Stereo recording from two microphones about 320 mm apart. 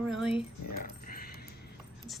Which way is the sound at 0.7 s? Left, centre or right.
Left.